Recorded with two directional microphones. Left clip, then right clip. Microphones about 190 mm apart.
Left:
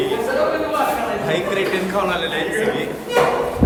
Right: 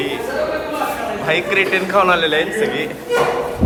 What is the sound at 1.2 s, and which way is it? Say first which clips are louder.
A man's voice: right 8 dB; 15° left (ahead or behind).